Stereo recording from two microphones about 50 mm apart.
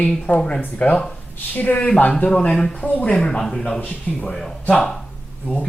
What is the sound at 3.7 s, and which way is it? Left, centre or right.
Speech, left.